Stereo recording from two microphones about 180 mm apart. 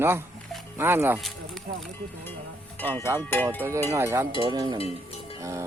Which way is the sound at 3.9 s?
15° right (ahead or behind).